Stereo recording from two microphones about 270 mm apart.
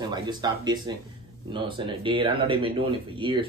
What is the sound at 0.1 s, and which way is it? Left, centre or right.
Speech, centre.